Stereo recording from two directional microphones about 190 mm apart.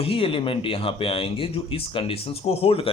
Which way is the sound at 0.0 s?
30° left (ahead or behind).